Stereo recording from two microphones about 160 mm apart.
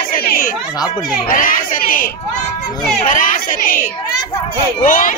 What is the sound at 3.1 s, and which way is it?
Speech, 55° left (ahead or behind).